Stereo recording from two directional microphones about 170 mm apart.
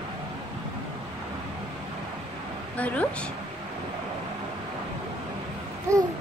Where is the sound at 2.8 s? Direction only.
10° left (ahead or behind).